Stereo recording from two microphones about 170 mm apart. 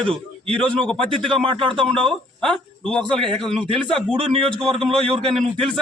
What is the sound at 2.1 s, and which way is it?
A man's voice, 5° left (ahead or behind).